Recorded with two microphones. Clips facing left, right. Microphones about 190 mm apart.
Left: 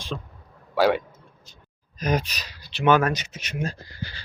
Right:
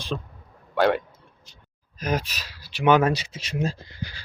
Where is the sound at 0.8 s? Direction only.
5° left (ahead or behind); by 3.1 s 15° right (ahead or behind).